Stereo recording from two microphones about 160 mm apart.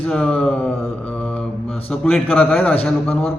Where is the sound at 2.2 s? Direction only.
10° left (ahead or behind).